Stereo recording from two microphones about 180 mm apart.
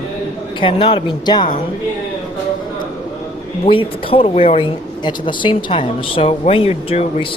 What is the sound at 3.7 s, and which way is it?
Speech, 30° left (ahead or behind).